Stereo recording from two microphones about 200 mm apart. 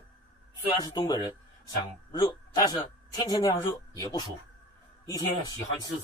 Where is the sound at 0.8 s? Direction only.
20° left (ahead or behind).